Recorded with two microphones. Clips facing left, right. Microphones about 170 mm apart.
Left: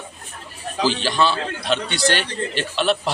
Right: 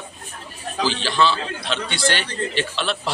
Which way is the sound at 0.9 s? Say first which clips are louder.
Left 1 dB; 15° left (ahead or behind).